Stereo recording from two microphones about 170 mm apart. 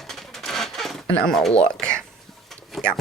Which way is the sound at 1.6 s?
5° left (ahead or behind).